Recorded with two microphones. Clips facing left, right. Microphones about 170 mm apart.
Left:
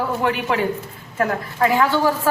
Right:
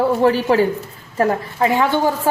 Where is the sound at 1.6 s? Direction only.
20° right (ahead or behind).